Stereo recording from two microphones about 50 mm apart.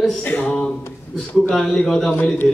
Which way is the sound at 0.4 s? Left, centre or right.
Centre.